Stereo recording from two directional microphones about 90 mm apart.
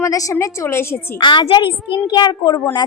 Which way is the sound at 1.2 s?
60° left (ahead or behind).